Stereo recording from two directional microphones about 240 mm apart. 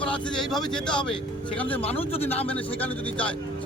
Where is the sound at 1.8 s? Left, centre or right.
Left.